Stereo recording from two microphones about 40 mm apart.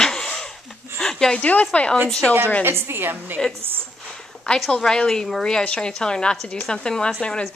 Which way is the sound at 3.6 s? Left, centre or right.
Right.